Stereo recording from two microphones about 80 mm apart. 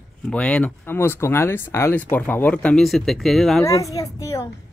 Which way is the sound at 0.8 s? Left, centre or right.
Left.